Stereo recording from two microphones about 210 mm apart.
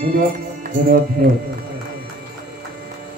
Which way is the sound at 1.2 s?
45° right (ahead or behind).